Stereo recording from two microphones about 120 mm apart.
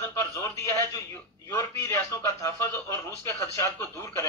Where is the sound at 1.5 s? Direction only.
25° left (ahead or behind).